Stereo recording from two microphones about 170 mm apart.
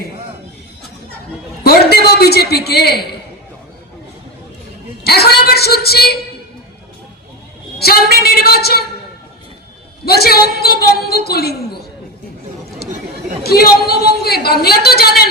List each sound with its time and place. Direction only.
1.6 s a man's voice: 65° left (ahead or behind)
5.0 s a woman's voice: 70° left (ahead or behind)
7.8 s a woman's voice: 65° left (ahead or behind)
10.1 s a woman's voice: 65° left (ahead or behind)
13.4 s a woman's voice: 65° left (ahead or behind)